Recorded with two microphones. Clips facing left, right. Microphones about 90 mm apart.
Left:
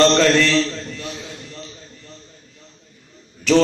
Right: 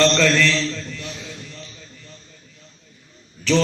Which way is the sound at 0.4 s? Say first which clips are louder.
Left 3 dB; 40° left (ahead or behind).